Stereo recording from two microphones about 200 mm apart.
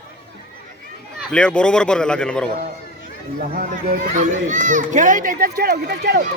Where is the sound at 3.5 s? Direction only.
45° right (ahead or behind).